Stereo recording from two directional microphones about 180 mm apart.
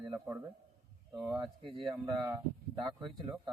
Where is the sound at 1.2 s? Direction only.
20° right (ahead or behind).